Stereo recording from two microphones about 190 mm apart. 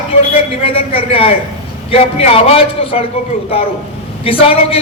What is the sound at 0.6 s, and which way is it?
A man's voice, 30° left (ahead or behind).